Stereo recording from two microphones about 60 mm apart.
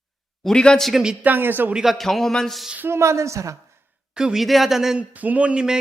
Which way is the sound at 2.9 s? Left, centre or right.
Right.